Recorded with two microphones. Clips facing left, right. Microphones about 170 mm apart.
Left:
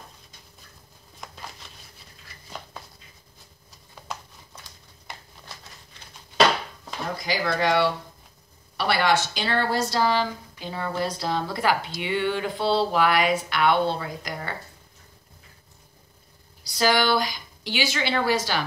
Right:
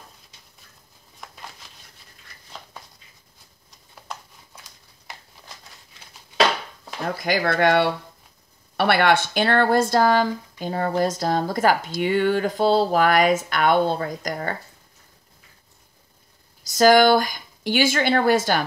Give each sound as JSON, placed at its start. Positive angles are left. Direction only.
{"t": 7.2, "sound": "speech", "side_deg": -60}
{"t": 16.6, "sound": "speech", "side_deg": -45}